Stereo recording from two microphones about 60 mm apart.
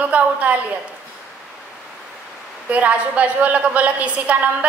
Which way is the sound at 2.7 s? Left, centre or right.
Right.